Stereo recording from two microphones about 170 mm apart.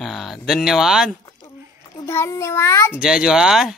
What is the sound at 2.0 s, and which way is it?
Child singing, 15° left (ahead or behind).